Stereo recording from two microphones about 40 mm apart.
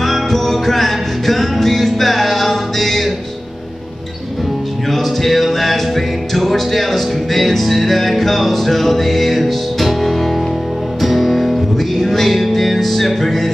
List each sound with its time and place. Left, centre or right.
0.0 s music: centre
4.9 s music: centre